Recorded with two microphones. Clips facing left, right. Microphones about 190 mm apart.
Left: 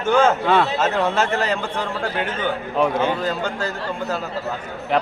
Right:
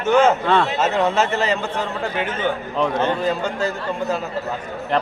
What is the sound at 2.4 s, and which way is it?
Speech, 10° left (ahead or behind).